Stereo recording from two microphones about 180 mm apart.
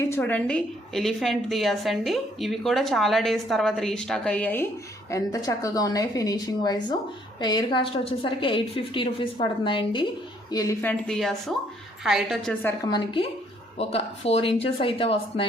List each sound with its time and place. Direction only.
0.1 s a woman's voice: 10° left (ahead or behind)
12.8 s a woman's voice: 25° left (ahead or behind)
13.7 s speech: 35° left (ahead or behind)